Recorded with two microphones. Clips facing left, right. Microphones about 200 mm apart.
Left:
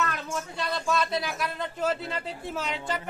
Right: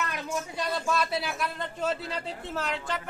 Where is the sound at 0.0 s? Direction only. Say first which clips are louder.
Left 1 dB; 15° right (ahead or behind).